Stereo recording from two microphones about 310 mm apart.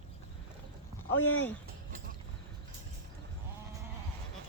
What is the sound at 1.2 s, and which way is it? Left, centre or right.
Speech, left.